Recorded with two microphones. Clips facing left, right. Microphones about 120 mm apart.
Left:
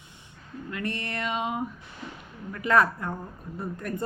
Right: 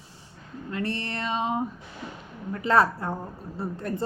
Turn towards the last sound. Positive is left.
turn(degrees=-30)  # may be behind; listen again after turning